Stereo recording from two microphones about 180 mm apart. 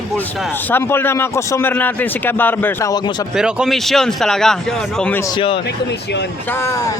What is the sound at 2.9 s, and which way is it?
Speech, 25° left (ahead or behind).